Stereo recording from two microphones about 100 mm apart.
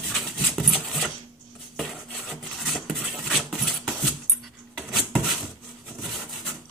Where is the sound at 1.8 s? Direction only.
Centre (ahead or behind).